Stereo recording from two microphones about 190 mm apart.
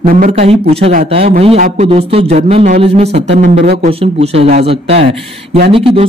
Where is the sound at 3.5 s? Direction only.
60° right (ahead or behind).